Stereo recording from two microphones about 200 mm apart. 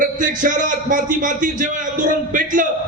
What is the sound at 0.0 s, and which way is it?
A man's voice, 40° right (ahead or behind).